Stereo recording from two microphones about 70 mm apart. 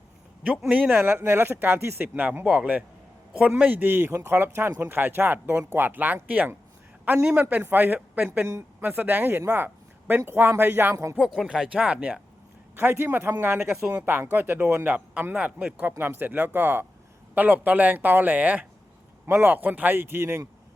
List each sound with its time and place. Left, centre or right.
0.4 s speech: centre
0.9 s speech: right; by 7.4 s centre
7.5 s speech: right
9.6 s a sound: right
10.2 s speech: right
11.2 s speech: centre
12.7 s speech: right